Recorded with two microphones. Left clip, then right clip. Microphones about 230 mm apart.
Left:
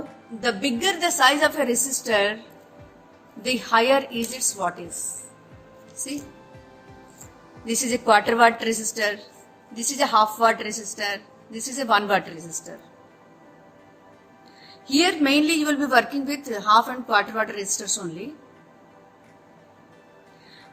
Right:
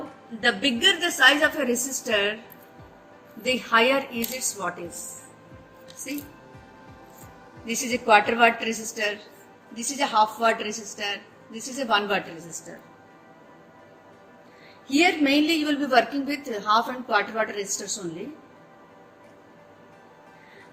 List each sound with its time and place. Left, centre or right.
0.3 s a woman's voice: left
3.4 s a woman's voice: left
7.7 s a woman's voice: left
14.8 s a woman's voice: left